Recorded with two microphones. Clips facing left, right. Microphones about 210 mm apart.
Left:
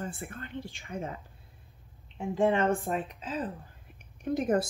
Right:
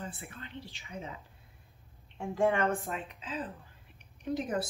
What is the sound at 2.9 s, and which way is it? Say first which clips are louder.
A woman's voice: left 5 dB; 40° left (ahead or behind).